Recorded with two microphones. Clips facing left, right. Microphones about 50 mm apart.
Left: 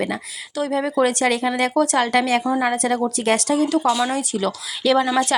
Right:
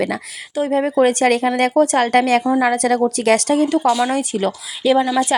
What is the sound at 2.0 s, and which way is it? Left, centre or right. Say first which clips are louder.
Speech: right 4 dB; right.